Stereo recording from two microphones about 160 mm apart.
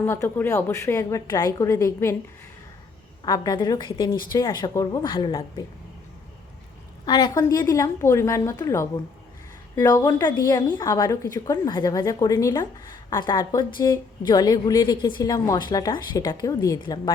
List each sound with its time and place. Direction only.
0.0 s a woman's voice: 15° left (ahead or behind)
3.2 s a woman's voice: 20° left (ahead or behind)
7.0 s a woman's voice: 25° left (ahead or behind)